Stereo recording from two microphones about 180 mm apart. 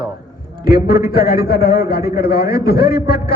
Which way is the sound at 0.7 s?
60° left (ahead or behind).